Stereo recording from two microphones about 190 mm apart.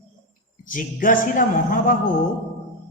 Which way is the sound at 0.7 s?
45° left (ahead or behind).